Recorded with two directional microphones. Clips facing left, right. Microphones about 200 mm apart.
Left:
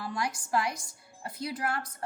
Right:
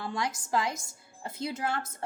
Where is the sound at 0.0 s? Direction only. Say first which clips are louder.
Right 1 dB; 25° right (ahead or behind).